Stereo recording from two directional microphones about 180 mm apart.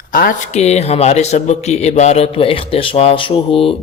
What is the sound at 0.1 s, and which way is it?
A man's voice, 50° left (ahead or behind).